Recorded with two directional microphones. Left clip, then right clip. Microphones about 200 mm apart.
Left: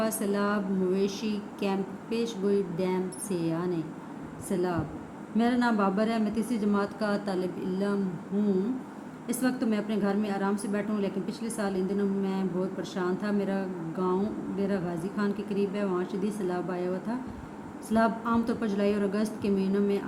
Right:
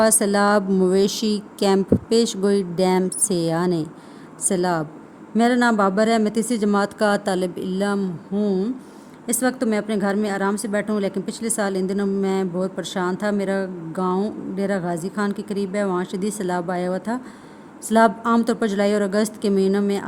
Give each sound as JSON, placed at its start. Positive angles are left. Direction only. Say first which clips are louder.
{"t": 0.0, "sound": "a woman's voice", "louder": "right 12 dB", "side_deg": -60}